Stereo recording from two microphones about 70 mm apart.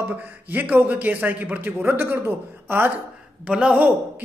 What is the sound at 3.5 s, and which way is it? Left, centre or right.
Speech, centre.